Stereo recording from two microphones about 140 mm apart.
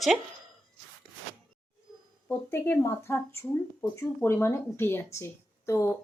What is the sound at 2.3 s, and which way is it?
Speech, 15° left (ahead or behind).